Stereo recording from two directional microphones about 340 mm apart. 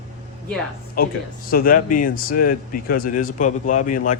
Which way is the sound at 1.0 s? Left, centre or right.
Left.